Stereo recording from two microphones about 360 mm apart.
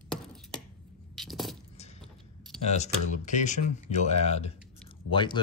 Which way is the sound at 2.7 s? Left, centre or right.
Centre.